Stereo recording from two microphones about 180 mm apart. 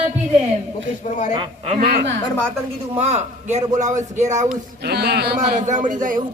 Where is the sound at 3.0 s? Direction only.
40° right (ahead or behind).